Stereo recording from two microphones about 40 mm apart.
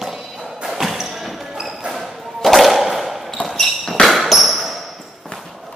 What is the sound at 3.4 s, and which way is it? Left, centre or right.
Basketball bounce, left.